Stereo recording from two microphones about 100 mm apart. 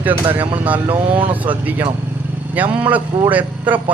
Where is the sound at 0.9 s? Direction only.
60° right (ahead or behind).